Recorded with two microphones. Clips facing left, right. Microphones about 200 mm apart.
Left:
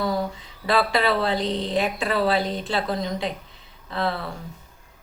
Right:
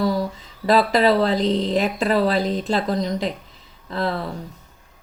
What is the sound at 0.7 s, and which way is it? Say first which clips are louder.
A woman's voice: right 5 dB; 40° right (ahead or behind).